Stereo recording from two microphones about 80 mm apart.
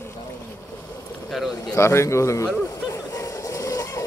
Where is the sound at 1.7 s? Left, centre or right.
Left.